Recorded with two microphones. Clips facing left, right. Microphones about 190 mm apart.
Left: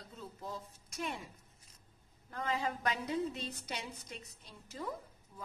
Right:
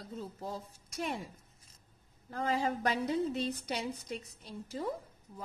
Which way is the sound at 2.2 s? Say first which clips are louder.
Right 4 dB; 30° right (ahead or behind).